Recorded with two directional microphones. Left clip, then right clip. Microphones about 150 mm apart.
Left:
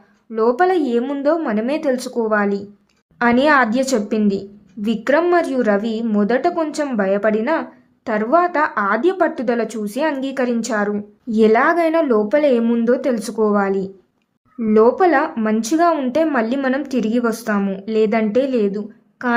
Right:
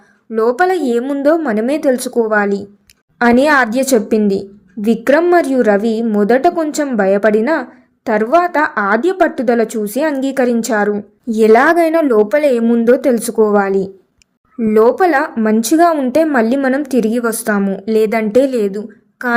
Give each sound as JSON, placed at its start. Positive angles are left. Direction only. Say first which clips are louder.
{"t": 0.3, "sound": "a woman's voice", "louder": "right 3 dB", "side_deg": -25}